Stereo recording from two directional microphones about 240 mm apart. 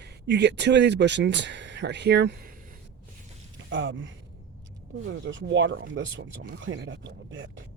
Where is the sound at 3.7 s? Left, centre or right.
Right.